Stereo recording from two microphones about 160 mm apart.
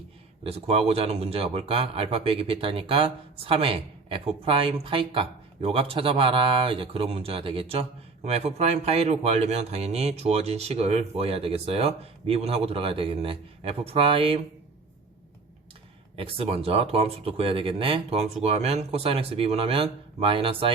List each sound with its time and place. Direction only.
0.4 s speech: 35° right (ahead or behind)
16.1 s speech: 35° right (ahead or behind)